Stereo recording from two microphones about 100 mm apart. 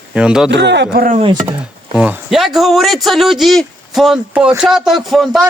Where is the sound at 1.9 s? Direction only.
15° right (ahead or behind).